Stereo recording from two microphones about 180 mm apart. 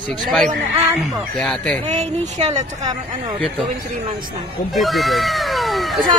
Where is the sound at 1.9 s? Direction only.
40° right (ahead or behind).